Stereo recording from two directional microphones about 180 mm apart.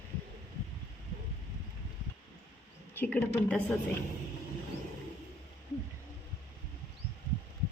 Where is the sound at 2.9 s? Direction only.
10° left (ahead or behind).